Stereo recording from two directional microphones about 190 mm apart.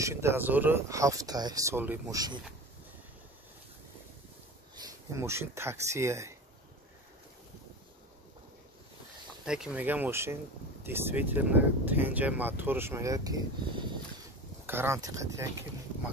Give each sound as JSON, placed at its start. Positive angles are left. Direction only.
{"t": 0.0, "sound": "speech", "side_deg": -15}
{"t": 4.7, "sound": "speech", "side_deg": -15}
{"t": 9.4, "sound": "speech", "side_deg": -5}